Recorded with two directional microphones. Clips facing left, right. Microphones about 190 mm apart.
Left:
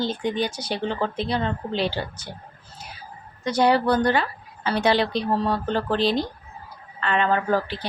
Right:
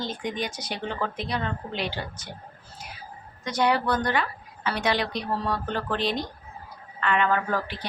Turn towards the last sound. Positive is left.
turn(degrees=30)  # may be behind; listen again after turning